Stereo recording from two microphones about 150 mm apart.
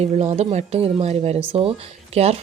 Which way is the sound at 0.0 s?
45° right (ahead or behind).